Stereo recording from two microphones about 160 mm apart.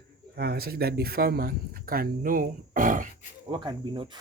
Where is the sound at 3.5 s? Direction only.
30° right (ahead or behind).